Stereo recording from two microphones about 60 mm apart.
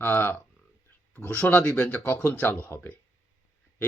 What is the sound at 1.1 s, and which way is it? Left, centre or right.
Speech, left.